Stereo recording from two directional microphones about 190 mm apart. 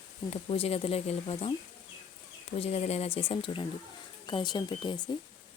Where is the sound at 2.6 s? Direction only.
35° left (ahead or behind).